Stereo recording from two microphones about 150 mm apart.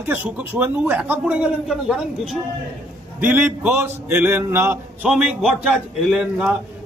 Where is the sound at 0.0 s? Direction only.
10° right (ahead or behind).